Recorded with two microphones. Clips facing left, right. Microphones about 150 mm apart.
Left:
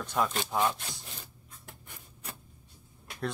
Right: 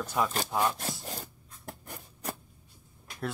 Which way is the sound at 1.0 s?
40° right (ahead or behind).